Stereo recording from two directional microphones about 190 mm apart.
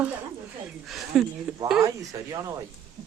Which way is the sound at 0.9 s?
Centre (ahead or behind).